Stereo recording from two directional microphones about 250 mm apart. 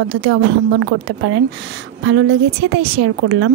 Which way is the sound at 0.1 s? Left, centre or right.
Right.